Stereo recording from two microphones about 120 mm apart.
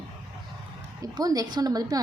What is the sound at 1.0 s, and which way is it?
A woman's voice, 30° right (ahead or behind).